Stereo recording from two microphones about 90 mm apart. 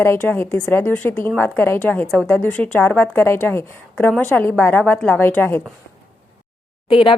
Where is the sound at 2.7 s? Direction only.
20° left (ahead or behind).